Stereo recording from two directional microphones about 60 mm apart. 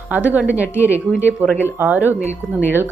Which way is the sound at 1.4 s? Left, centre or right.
Right.